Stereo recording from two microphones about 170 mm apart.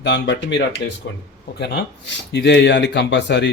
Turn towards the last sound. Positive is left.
turn(degrees=90)